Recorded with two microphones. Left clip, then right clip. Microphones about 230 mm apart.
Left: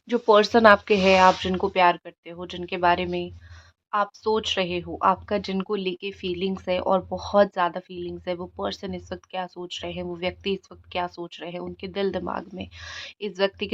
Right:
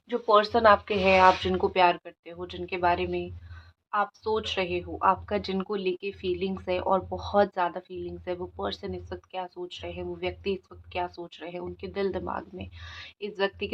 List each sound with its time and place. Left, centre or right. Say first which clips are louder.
0.1 s speech: left 4 dB; left